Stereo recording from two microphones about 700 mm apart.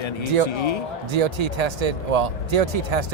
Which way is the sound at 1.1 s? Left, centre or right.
Right.